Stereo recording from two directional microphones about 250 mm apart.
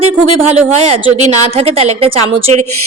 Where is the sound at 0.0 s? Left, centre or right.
Right.